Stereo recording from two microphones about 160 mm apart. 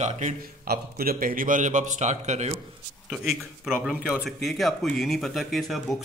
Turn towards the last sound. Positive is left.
turn(degrees=0)  # may be behind; listen again after turning